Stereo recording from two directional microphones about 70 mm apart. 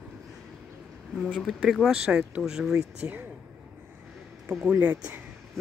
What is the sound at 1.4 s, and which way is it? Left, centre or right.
Speech, centre.